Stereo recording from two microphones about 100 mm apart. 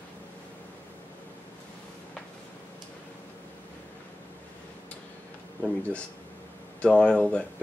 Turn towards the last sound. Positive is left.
turn(degrees=10)  # may be behind; listen again after turning